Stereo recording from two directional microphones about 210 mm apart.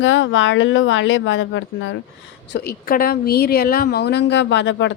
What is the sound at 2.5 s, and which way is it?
Speech, 50° left (ahead or behind).